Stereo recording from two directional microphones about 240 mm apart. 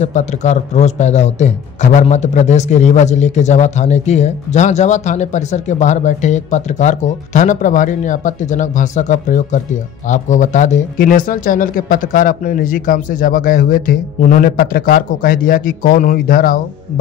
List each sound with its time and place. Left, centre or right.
0.0 s speech: left